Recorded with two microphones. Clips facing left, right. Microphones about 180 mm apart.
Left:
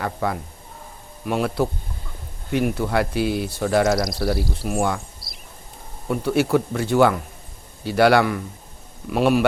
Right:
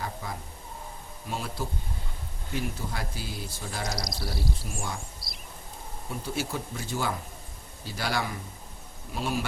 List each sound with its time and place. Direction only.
0.0 s speech: 70° left (ahead or behind)
3.9 s speech: centre (ahead or behind)
4.6 s speech: 65° left (ahead or behind)
5.2 s a sound: centre (ahead or behind)
6.1 s speech: 65° left (ahead or behind)